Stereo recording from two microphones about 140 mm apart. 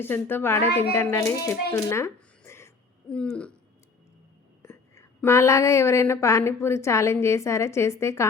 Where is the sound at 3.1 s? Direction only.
10° left (ahead or behind).